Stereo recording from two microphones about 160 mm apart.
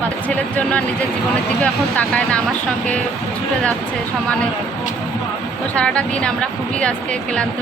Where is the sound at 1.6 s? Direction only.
5° left (ahead or behind).